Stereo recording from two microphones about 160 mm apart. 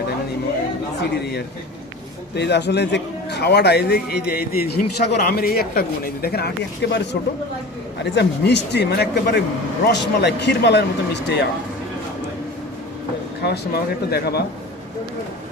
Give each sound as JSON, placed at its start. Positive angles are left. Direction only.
{"t": 1.2, "sound": "a man's voice", "side_deg": 90}
{"t": 6.2, "sound": "a man's voice", "side_deg": 85}
{"t": 14.1, "sound": "a man's voice", "side_deg": 90}